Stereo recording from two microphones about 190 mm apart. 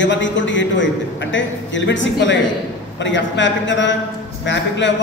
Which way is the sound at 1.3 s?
75° left (ahead or behind).